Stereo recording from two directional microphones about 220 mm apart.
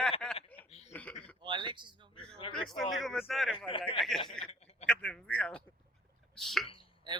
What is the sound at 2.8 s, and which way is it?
Speech, centre (ahead or behind).